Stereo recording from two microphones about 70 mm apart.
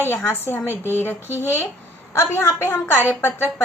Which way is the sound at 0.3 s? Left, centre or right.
Left.